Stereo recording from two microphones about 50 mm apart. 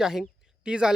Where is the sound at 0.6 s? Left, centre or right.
Centre.